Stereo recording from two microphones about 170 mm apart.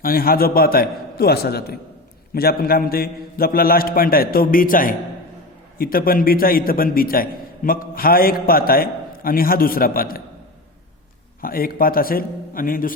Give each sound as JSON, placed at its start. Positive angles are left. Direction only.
{"t": 0.0, "sound": "a man's voice", "side_deg": 60}
{"t": 11.3, "sound": "a man's voice", "side_deg": 60}